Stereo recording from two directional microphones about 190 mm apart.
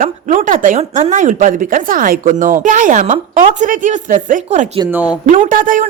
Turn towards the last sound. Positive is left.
turn(degrees=-45)  # may be behind; listen again after turning